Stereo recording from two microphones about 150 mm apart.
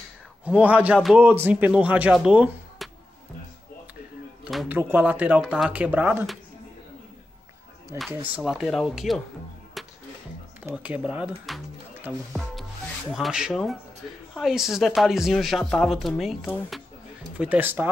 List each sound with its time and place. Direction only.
0.5 s speech: 10° right (ahead or behind)
2.8 s music: centre (ahead or behind)
4.6 s speech: 15° right (ahead or behind)
7.9 s speech: 15° right (ahead or behind)
8.4 s speech: 5° right (ahead or behind)
9.8 s music: centre (ahead or behind)
10.6 s speech: 10° right (ahead or behind)
12.3 s rub: centre (ahead or behind)
13.1 s speech: 5° right (ahead or behind)
17.4 s speech: 10° right (ahead or behind)